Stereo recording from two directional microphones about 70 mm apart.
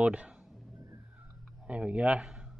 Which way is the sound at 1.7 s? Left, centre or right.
Centre.